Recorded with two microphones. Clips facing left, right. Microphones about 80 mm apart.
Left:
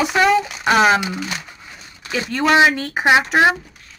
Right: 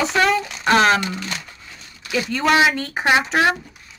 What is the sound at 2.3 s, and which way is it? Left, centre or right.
Speech, centre.